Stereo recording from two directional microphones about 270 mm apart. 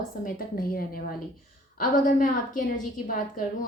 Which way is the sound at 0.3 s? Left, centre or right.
Left.